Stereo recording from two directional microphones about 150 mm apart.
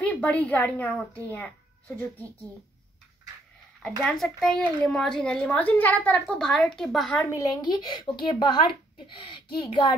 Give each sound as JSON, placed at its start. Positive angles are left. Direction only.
{"t": 0.0, "sound": "a child's voice", "side_deg": 10}
{"t": 4.0, "sound": "a woman's voice", "side_deg": 5}
{"t": 7.2, "sound": "a woman's voice", "side_deg": 20}